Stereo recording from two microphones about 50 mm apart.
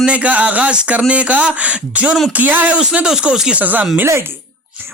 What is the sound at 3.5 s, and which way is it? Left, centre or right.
Speech, right.